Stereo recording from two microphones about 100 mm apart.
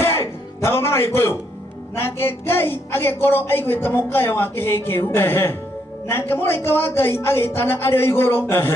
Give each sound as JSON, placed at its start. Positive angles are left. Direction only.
{"t": 0.0, "sound": "music", "side_deg": 25}
{"t": 2.0, "sound": "a woman's voice", "side_deg": 25}